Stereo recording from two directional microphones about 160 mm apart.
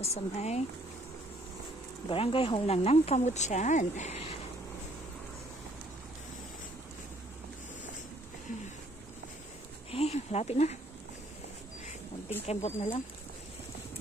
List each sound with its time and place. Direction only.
0.0 s speech: 40° left (ahead or behind)
2.0 s speech: 35° left (ahead or behind)
9.8 s a sound: 40° left (ahead or behind)
12.4 s speech: 40° left (ahead or behind)